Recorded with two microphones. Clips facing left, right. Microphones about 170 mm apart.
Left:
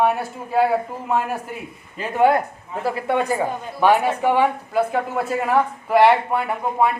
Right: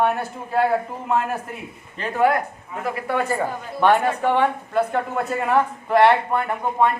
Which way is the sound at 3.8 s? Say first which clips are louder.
Left 1 dB; 5° left (ahead or behind).